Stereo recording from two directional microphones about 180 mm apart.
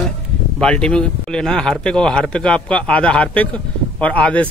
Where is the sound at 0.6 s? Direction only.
5° left (ahead or behind).